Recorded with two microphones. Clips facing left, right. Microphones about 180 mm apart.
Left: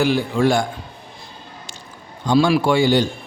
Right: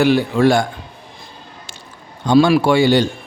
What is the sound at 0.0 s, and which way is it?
Speech, 65° right (ahead or behind).